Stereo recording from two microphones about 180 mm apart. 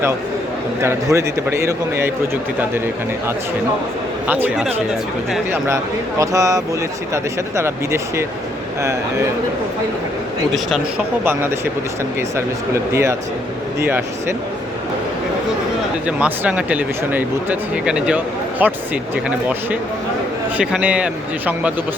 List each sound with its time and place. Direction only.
0.8 s a man's voice: 15° right (ahead or behind)
5.6 s a man's voice: 15° right (ahead or behind)
10.5 s speech: centre (ahead or behind)
12.7 s a man's voice: 15° right (ahead or behind)
16.0 s a man's voice: 5° right (ahead or behind)
20.6 s a man's voice: 5° right (ahead or behind)